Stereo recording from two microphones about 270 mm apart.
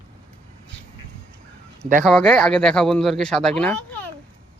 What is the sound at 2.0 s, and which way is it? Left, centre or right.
Speech, centre.